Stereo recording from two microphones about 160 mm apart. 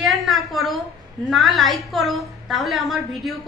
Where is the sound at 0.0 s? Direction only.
Centre (ahead or behind).